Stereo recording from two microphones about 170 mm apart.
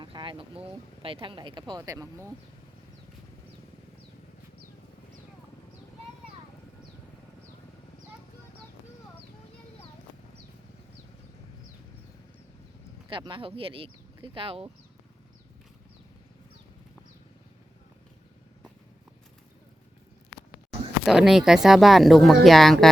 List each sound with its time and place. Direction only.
0.0 s speech: 30° right (ahead or behind)
13.1 s speech: 30° right (ahead or behind)
21.0 s speech: centre (ahead or behind)